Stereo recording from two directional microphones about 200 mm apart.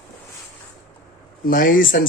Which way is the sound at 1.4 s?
45° left (ahead or behind).